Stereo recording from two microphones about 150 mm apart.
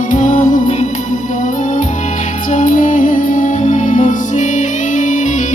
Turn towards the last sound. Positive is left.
turn(degrees=55)  # may be behind; listen again after turning